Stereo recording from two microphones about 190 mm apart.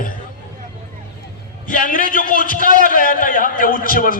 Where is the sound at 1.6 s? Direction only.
45° left (ahead or behind).